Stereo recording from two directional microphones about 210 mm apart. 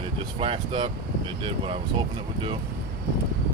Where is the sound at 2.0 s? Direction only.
20° right (ahead or behind).